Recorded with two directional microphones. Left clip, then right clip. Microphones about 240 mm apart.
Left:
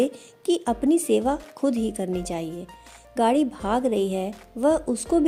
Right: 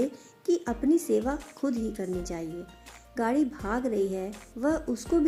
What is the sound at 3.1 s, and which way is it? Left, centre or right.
Speech, left.